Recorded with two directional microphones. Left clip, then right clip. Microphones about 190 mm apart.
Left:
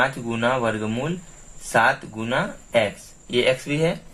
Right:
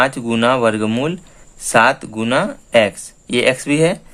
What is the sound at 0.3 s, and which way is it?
Speech, 60° right (ahead or behind).